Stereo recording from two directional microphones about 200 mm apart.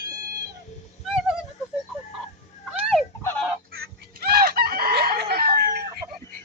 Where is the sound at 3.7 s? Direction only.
50° right (ahead or behind).